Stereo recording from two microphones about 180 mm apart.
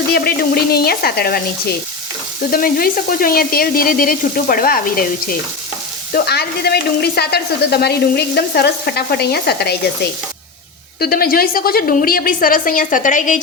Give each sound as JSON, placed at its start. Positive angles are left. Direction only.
{"t": 0.1, "sound": "speech", "side_deg": 60}
{"t": 2.5, "sound": "sizzle", "side_deg": 55}
{"t": 6.1, "sound": "speech", "side_deg": 60}
{"t": 11.0, "sound": "sizzle", "side_deg": 55}